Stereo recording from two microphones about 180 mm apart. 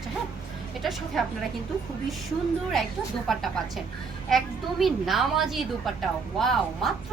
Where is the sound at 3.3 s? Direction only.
Centre (ahead or behind).